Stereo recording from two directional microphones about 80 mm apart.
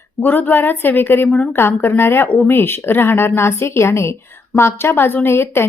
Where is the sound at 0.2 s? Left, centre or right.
Left.